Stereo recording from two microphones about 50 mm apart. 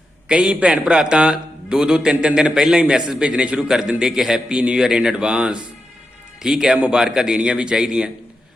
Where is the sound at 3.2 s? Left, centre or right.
Right.